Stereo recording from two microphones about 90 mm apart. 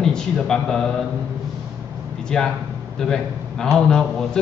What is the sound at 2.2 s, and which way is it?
A man's voice, 5° left (ahead or behind).